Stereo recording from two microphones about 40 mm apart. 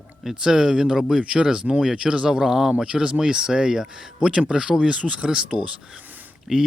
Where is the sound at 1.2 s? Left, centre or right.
Right.